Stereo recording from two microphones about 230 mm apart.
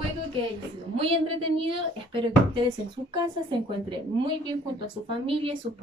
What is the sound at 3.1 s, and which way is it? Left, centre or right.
A woman's voice, right.